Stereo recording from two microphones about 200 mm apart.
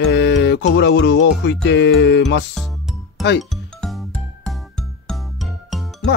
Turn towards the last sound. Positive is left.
turn(degrees=0)  # may be behind; listen again after turning